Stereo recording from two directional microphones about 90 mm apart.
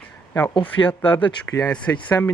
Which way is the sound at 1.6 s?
15° left (ahead or behind).